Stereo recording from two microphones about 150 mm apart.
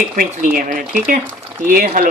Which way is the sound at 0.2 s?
70° right (ahead or behind).